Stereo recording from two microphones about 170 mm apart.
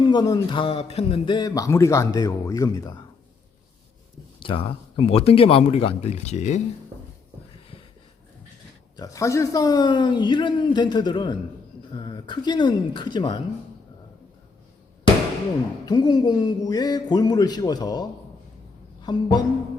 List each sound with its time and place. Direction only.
0.0 s speech: 25° left (ahead or behind)
4.4 s speech: 30° left (ahead or behind)
9.0 s speech: 20° left (ahead or behind)
15.9 s speech: 25° left (ahead or behind)
19.0 s speech: 25° left (ahead or behind)